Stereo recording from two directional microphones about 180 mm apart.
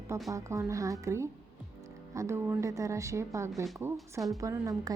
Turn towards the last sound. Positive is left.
turn(degrees=-20)  # may be behind; listen again after turning